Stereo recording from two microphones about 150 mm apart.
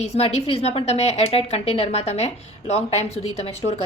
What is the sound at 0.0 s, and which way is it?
A woman's voice, 45° left (ahead or behind).